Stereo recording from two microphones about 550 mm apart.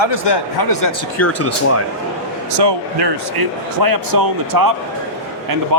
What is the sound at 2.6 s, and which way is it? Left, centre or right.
Speech, right.